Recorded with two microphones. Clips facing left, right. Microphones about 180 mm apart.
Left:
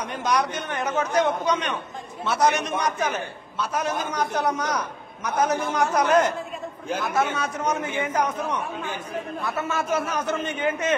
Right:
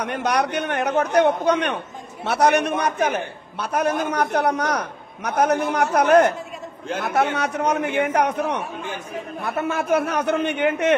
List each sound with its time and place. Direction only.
0.0 s a man's voice: 65° right (ahead or behind)
9.4 s a man's voice: 60° right (ahead or behind)